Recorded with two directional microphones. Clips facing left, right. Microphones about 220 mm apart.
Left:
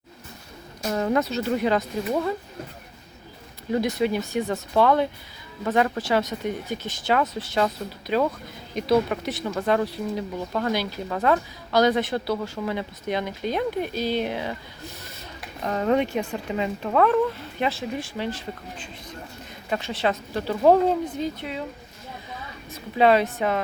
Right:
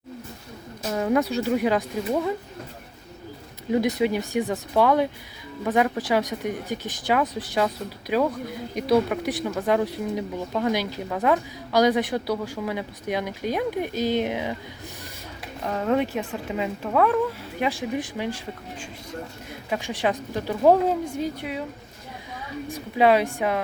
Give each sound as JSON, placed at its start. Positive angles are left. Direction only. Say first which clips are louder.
{"t": 0.9, "sound": "speech", "louder": "right 1 dB", "side_deg": -5}
{"t": 3.7, "sound": "speech", "louder": "right 1 dB", "side_deg": -15}
{"t": 15.6, "sound": "speech", "louder": "left 1 dB", "side_deg": 0}
{"t": 22.7, "sound": "speech", "louder": "even", "side_deg": -10}